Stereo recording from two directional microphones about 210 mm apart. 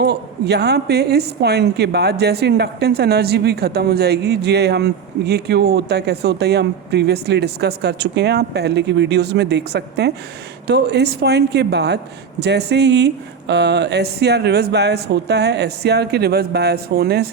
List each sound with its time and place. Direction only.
0.0 s a woman's voice: 50° right (ahead or behind)